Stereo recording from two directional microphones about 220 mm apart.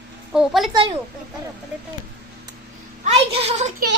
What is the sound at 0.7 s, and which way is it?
Speech, 20° right (ahead or behind).